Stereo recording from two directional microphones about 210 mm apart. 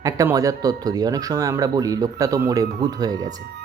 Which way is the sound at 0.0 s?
15° right (ahead or behind).